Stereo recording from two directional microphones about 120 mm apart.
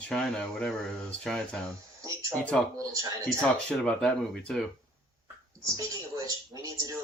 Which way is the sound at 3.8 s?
5° left (ahead or behind).